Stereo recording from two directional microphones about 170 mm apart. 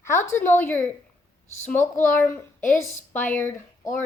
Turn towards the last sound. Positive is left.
turn(degrees=10)  # may be behind; listen again after turning